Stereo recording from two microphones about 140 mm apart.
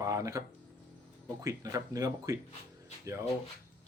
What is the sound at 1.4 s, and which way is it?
Speech, 25° right (ahead or behind).